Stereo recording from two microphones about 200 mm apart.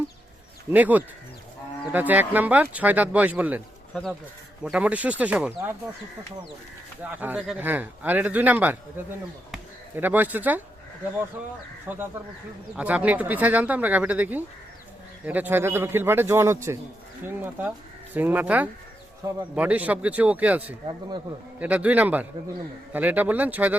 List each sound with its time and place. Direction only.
0.7 s speech: 10° right (ahead or behind)
4.6 s speech: 5° right (ahead or behind)
7.0 s speech: 10° right (ahead or behind)
9.5 s a sound: 10° right (ahead or behind)
11.9 s speech: 10° right (ahead or behind)